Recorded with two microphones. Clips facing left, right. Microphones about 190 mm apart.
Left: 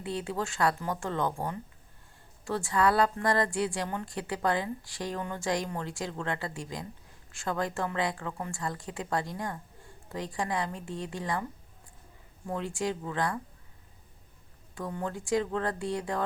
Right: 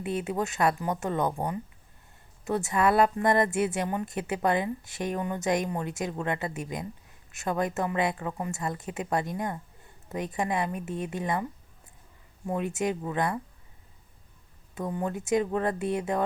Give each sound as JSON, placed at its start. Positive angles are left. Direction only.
{"t": 0.0, "sound": "speech", "side_deg": -20}
{"t": 12.5, "sound": "speech", "side_deg": -20}
{"t": 14.8, "sound": "speech", "side_deg": -20}